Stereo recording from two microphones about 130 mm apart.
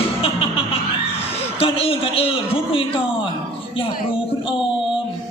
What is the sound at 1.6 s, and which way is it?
Speech, 45° left (ahead or behind).